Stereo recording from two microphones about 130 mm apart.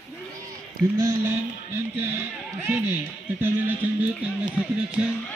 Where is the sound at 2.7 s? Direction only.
15° right (ahead or behind).